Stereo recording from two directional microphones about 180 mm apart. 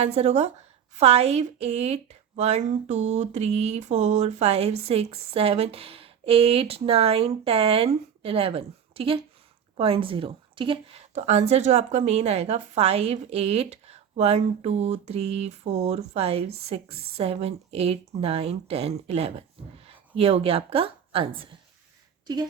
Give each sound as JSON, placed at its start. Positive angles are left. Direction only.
{"t": 0.0, "sound": "a woman's voice", "side_deg": -35}
{"t": 11.1, "sound": "a woman's voice", "side_deg": -40}